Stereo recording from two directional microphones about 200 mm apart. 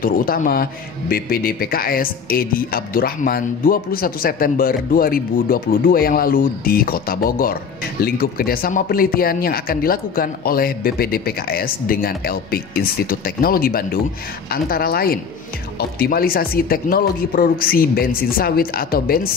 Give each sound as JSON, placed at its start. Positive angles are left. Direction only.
{"t": 0.0, "sound": "a man's voice", "side_deg": 45}